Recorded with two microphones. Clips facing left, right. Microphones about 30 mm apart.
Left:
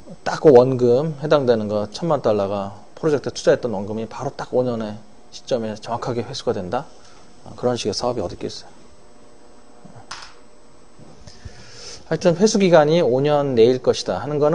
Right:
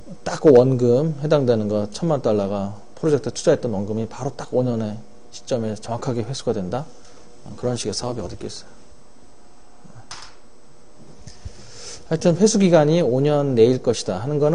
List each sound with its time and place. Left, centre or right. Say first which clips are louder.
0.3 s a man's voice: left 1 dB; centre
10.0 s a sound: left 3 dB; centre
11.4 s speech: left 1 dB; centre